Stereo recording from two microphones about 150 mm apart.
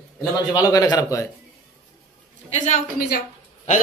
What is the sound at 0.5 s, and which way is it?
Speech, 25° left (ahead or behind).